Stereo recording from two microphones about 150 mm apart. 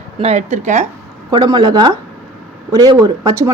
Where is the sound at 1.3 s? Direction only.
30° right (ahead or behind).